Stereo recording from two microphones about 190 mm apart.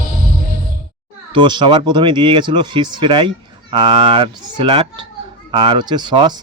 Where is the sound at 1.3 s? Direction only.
25° right (ahead or behind).